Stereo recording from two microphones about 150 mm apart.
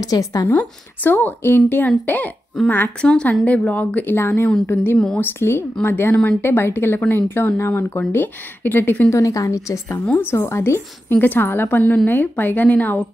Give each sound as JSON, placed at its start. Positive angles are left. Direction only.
{"t": 0.0, "sound": "speech", "side_deg": 25}
{"t": 0.5, "sound": "a woman's voice", "side_deg": 10}
{"t": 4.9, "sound": "speech", "side_deg": 5}
{"t": 5.4, "sound": "a woman's voice", "side_deg": 15}